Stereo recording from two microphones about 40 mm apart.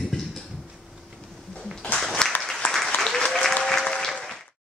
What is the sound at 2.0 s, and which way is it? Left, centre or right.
Applause, centre.